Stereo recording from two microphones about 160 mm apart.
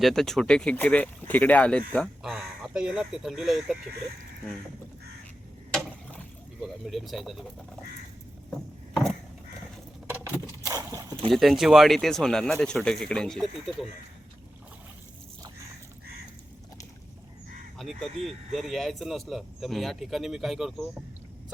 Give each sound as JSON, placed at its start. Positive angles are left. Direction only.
{"t": 0.0, "sound": "speech", "side_deg": 0}
{"t": 5.7, "sound": "a sound", "side_deg": 0}
{"t": 8.4, "sound": "vehicle", "side_deg": 0}
{"t": 10.1, "sound": "a sound", "side_deg": -10}
{"t": 11.3, "sound": "speech", "side_deg": 0}
{"t": 17.7, "sound": "speech", "side_deg": 0}